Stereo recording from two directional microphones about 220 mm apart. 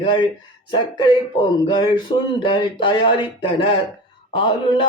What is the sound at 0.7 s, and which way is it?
Speech, 20° left (ahead or behind).